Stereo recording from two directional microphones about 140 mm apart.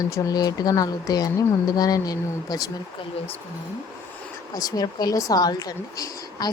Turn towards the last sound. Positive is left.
turn(degrees=30)  # may be behind; listen again after turning